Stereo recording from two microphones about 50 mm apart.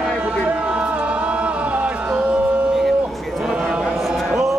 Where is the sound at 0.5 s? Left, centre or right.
Right.